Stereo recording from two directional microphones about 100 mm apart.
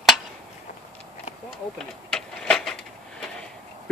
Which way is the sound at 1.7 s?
5° left (ahead or behind).